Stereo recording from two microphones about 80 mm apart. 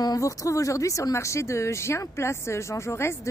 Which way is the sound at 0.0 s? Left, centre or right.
Left.